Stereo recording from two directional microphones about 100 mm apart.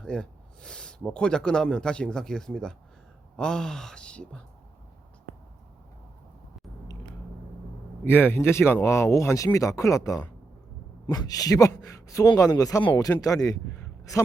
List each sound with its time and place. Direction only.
0.0 s speech: 10° left (ahead or behind)
8.0 s a woman's voice: 20° left (ahead or behind); by 13.6 s 35° left (ahead or behind)